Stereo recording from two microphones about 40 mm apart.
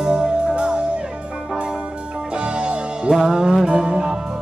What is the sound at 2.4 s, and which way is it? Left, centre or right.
Music, right.